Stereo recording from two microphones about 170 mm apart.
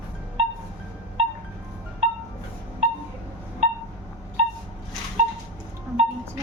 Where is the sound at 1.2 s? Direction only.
35° right (ahead or behind).